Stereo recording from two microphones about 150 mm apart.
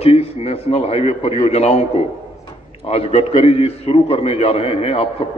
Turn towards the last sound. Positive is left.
turn(degrees=40)  # may be behind; listen again after turning